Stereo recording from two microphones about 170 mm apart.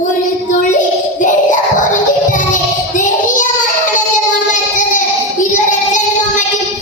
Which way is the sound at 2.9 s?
50° left (ahead or behind).